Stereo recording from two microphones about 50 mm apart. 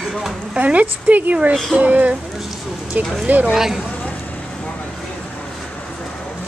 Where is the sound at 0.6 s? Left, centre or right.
Right.